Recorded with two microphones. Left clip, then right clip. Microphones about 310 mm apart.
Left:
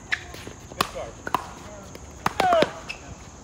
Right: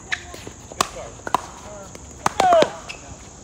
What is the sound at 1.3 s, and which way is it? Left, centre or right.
Chop, right.